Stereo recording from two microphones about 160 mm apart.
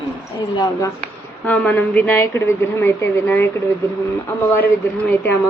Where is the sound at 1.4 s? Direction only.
10° left (ahead or behind).